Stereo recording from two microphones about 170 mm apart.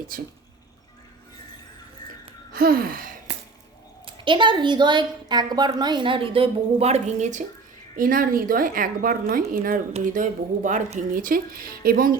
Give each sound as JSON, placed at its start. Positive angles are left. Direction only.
{"t": 0.1, "sound": "a woman's voice", "side_deg": -55}
{"t": 2.5, "sound": "a sound", "side_deg": -60}
{"t": 4.0, "sound": "a woman's voice", "side_deg": -30}
{"t": 7.9, "sound": "a woman's voice", "side_deg": -55}